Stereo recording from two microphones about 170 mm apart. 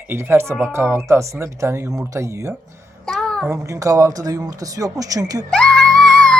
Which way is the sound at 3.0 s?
5° left (ahead or behind).